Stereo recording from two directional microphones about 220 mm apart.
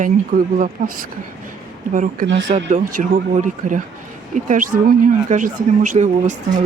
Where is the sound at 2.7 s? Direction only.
35° right (ahead or behind).